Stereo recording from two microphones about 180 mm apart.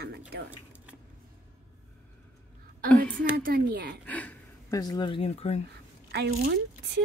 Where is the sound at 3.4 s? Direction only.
60° right (ahead or behind).